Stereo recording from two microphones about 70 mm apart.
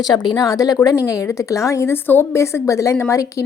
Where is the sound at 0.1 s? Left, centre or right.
Left.